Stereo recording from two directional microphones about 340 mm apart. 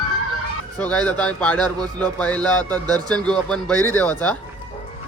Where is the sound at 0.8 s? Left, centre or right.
Centre.